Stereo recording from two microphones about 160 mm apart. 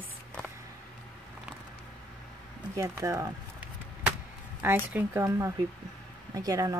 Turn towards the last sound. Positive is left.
turn(degrees=-20)  # may be behind; listen again after turning